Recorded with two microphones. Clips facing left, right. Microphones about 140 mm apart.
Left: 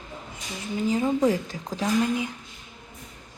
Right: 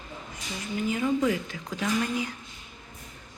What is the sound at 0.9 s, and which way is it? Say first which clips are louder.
Speech: left 3 dB; 35° left (ahead or behind).